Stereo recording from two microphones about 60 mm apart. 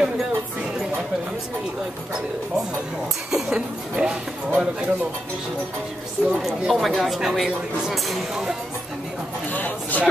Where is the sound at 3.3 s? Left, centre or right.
Centre.